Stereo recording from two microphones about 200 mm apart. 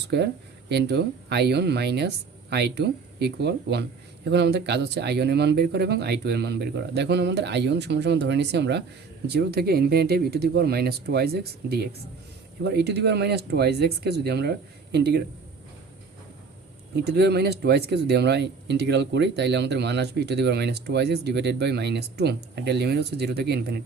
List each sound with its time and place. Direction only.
0.1 s speech: 55° right (ahead or behind)
16.9 s speech: 55° right (ahead or behind)